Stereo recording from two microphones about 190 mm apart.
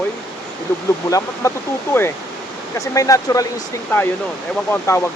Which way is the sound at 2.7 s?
15° left (ahead or behind).